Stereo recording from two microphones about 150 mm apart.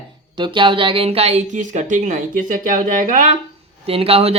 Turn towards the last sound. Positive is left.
turn(degrees=-40)  # may be behind; listen again after turning